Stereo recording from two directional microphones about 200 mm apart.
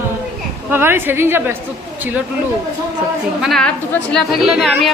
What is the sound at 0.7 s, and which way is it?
Speech, 10° right (ahead or behind).